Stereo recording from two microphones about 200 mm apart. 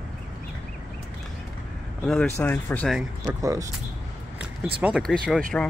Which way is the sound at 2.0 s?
10° left (ahead or behind).